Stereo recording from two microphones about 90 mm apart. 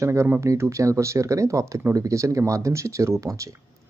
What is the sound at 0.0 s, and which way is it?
Speech, 30° right (ahead or behind).